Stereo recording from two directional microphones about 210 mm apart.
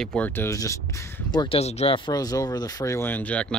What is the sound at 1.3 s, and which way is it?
Speech, 25° left (ahead or behind).